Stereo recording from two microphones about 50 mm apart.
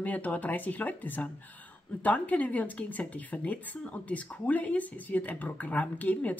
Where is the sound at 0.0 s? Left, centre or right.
Left.